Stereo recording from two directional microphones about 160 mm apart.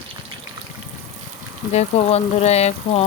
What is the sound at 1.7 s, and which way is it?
Speech, 40° left (ahead or behind).